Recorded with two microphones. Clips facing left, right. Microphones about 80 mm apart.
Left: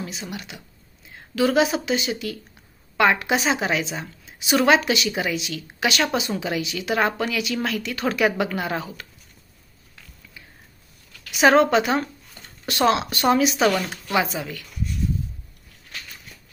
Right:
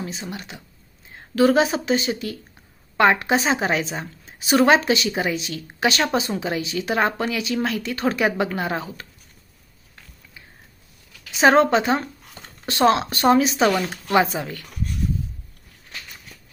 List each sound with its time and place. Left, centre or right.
0.0 s speech: right
11.3 s speech: right
13.7 s speech: centre
14.1 s speech: right